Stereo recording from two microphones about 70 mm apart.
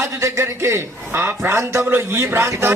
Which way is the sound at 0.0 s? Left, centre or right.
Right.